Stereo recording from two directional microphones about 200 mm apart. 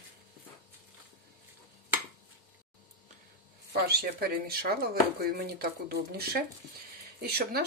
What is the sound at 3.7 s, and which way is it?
Speech, 50° right (ahead or behind).